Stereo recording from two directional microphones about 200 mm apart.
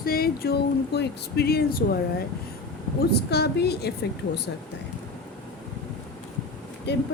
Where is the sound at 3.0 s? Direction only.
55° left (ahead or behind).